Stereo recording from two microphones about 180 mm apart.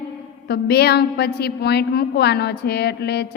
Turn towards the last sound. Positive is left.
turn(degrees=65)  # may be behind; listen again after turning